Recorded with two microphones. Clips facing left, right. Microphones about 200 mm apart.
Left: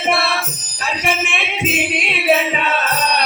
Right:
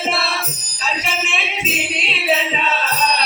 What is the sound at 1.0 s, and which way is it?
Music, 55° left (ahead or behind).